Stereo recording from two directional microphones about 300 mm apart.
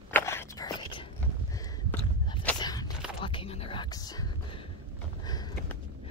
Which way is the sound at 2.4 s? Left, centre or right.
Centre.